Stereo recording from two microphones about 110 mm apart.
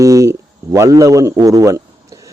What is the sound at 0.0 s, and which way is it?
A man's voice, 30° right (ahead or behind).